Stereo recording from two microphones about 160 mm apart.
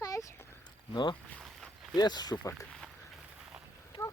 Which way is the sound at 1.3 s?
Centre (ahead or behind).